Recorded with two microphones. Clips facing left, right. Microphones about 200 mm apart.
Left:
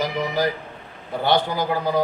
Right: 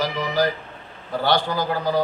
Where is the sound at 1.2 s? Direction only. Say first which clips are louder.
Left 1 dB; 20° left (ahead or behind).